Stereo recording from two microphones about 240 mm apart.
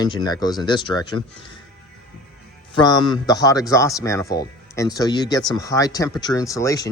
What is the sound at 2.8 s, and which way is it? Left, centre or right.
Speech, centre.